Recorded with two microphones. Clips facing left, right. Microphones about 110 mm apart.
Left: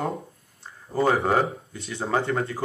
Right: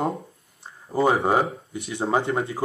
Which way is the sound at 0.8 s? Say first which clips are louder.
Right 1 dB; 15° right (ahead or behind).